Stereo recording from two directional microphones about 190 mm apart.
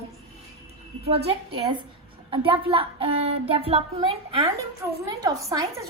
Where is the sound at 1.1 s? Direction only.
30° right (ahead or behind).